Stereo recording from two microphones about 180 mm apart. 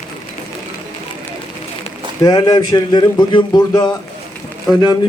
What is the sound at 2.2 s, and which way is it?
Speech, 20° left (ahead or behind).